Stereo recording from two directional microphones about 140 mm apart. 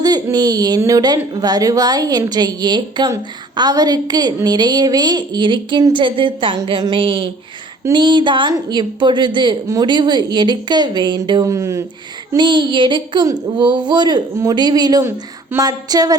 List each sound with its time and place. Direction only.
0.0 s a woman's voice: 30° right (ahead or behind)